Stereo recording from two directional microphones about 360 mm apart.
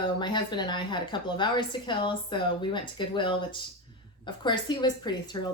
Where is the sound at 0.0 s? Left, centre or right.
Centre.